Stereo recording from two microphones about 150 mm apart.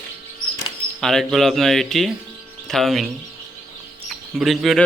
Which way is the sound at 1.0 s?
Centre (ahead or behind).